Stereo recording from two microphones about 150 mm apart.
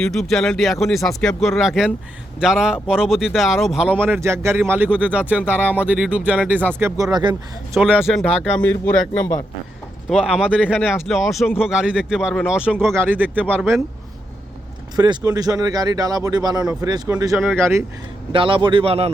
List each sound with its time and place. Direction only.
0.0 s speech: centre (ahead or behind)
6.7 s speech: 20° right (ahead or behind)
7.7 s speech: 5° right (ahead or behind)
10.1 s speech: 5° right (ahead or behind)
12.8 s speech: 15° right (ahead or behind)
14.9 s speech: 30° right (ahead or behind)
18.3 s a man's voice: 35° right (ahead or behind)